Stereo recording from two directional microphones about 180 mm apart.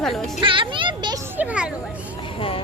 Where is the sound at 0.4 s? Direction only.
30° right (ahead or behind).